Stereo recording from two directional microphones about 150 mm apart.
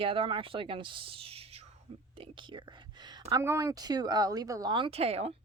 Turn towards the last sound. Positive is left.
turn(degrees=-45)  # may be behind; listen again after turning